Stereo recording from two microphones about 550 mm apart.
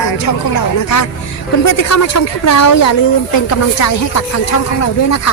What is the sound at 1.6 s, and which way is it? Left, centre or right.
Speech, left.